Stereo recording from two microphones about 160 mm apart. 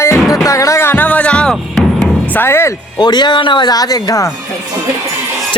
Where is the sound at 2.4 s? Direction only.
15° left (ahead or behind).